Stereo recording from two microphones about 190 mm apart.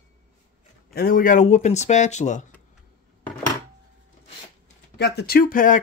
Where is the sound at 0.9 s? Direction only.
50° left (ahead or behind).